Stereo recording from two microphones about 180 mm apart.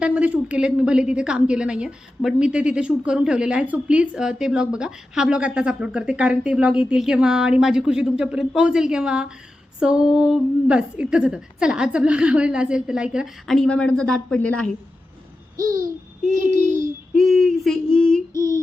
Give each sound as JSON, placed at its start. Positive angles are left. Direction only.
{"t": 0.0, "sound": "a woman's voice", "side_deg": -10}
{"t": 15.5, "sound": "babbling", "side_deg": -50}
{"t": 17.2, "sound": "a woman's voice", "side_deg": 0}